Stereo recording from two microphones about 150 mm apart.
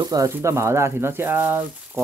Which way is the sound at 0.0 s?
25° right (ahead or behind).